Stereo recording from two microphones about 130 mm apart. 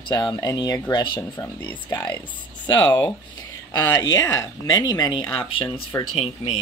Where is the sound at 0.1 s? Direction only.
30° left (ahead or behind).